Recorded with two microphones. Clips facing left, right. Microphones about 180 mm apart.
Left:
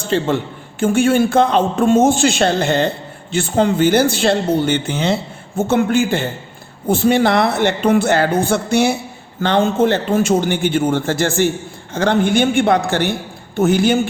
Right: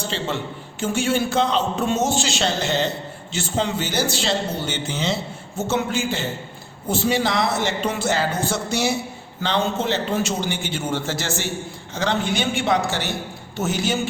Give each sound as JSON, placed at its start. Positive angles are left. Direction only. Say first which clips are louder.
{"t": 0.1, "sound": "a man's voice", "louder": "left 13 dB", "side_deg": 55}